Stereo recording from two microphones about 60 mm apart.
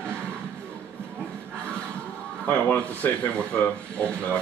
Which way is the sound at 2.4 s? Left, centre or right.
Left.